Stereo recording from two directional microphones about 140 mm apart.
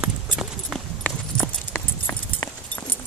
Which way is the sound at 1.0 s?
10° left (ahead or behind).